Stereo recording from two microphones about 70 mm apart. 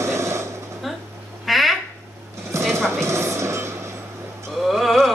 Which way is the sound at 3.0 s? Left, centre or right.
Right.